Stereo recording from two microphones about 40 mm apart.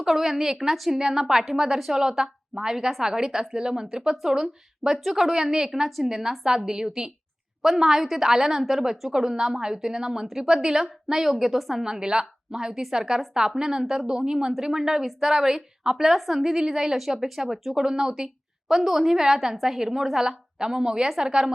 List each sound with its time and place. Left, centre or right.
0.1 s a woman's voice: centre
11.8 s a woman's voice: centre
14.1 s speech: centre